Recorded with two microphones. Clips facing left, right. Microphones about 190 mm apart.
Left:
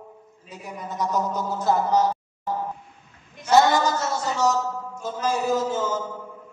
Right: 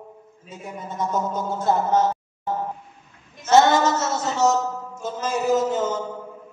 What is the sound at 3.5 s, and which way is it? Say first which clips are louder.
A man's voice: right 2 dB; 25° right (ahead or behind).